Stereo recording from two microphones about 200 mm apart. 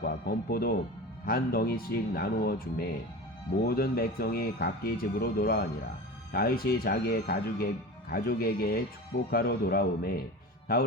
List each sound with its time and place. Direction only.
0.0 s speech: 50° left (ahead or behind)